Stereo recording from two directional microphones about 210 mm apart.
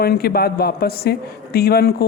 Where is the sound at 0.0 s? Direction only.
45° left (ahead or behind).